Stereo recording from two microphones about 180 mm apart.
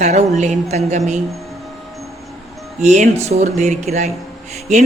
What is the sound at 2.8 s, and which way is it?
A man's voice, 40° right (ahead or behind).